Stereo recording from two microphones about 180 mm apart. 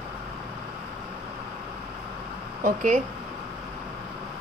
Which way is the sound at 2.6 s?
45° right (ahead or behind).